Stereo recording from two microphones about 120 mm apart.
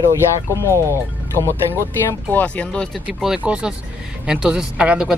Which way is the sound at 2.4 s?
10° left (ahead or behind).